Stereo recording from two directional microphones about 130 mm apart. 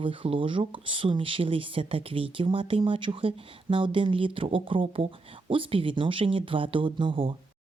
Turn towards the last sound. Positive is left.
turn(degrees=-40)  # may be behind; listen again after turning